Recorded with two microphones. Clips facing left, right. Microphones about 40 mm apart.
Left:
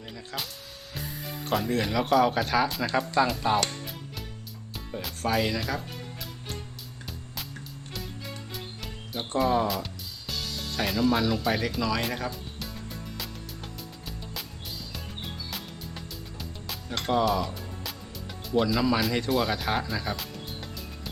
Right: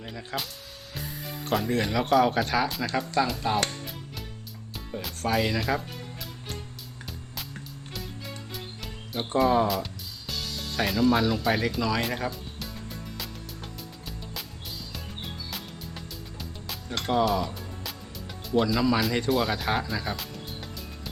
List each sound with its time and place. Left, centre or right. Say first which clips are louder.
0.3 s speech: right 3 dB; right
0.9 s speech: even; centre
4.9 s music: even; centre
7.9 s music: even; centre
14.9 s music: even; centre